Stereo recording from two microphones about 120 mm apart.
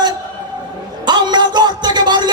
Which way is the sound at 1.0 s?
40° right (ahead or behind).